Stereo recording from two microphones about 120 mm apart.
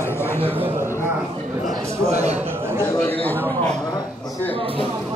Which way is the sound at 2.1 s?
65° right (ahead or behind).